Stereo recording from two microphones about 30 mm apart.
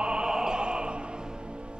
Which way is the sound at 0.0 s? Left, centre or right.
Right.